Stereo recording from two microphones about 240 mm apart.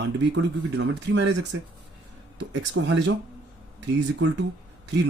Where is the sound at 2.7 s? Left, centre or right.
Right.